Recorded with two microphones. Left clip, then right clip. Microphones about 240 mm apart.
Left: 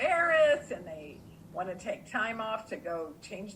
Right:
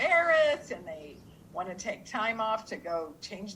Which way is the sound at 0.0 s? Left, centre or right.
Right.